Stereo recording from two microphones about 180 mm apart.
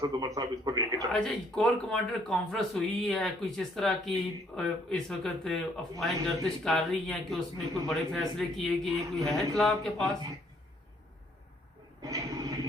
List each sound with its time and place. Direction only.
0.0 s a man's voice: 20° right (ahead or behind)
0.9 s speech: 5° left (ahead or behind)
12.0 s a sound: 20° right (ahead or behind)